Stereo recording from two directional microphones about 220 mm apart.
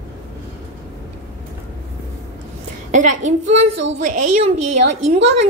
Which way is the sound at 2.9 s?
35° right (ahead or behind).